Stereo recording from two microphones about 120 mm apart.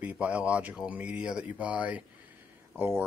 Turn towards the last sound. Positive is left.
turn(degrees=-20)  # may be behind; listen again after turning